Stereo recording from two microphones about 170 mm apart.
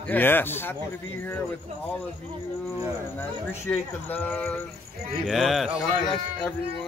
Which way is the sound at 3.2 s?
10° left (ahead or behind).